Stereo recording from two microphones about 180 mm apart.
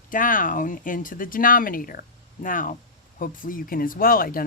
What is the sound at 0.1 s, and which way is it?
Speech, 50° left (ahead or behind).